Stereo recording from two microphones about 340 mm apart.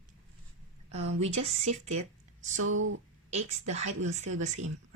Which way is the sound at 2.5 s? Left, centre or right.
Right.